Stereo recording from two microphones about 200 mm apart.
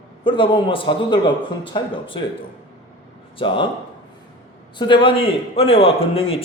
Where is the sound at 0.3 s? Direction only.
25° left (ahead or behind).